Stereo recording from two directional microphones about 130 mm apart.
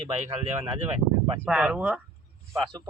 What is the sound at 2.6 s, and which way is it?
Speech, 35° right (ahead or behind).